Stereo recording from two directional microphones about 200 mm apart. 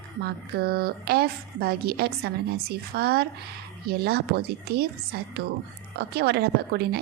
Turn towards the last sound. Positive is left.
turn(degrees=-50)  # may be behind; listen again after turning